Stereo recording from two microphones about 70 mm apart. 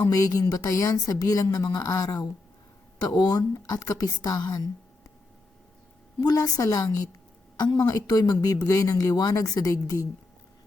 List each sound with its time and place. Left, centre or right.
0.0 s a woman's voice: left
6.1 s a woman's voice: left